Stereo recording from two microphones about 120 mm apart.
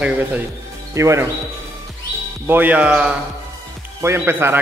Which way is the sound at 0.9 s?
25° right (ahead or behind).